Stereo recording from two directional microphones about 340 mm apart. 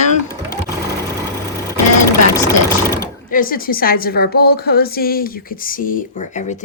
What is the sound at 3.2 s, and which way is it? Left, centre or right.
Speech, left.